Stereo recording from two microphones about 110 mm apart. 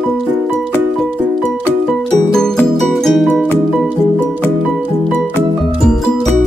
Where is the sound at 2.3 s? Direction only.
5° left (ahead or behind).